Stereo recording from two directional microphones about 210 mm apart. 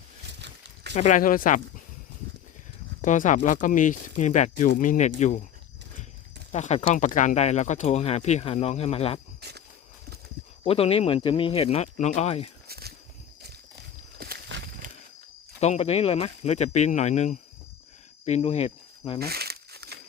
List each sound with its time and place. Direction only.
0.9 s speech: 35° left (ahead or behind)
3.0 s speech: 35° left (ahead or behind)
6.5 s speech: 30° left (ahead or behind)
9.4 s cricket: 50° right (ahead or behind)
10.6 s speech: 25° left (ahead or behind)
12.6 s a sound: 50° right (ahead or behind)
14.2 s walk: 45° right (ahead or behind)
15.6 s speech: 30° left (ahead or behind)
18.3 s cricket: 30° left (ahead or behind)
19.2 s crumpling: 50° right (ahead or behind)